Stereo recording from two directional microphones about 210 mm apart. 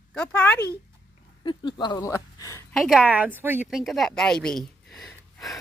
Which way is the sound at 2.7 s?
Centre (ahead or behind).